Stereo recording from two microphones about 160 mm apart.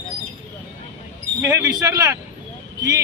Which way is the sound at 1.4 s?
20° right (ahead or behind).